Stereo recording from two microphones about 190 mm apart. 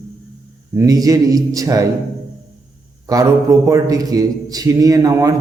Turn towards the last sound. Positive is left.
turn(degrees=-15)  # may be behind; listen again after turning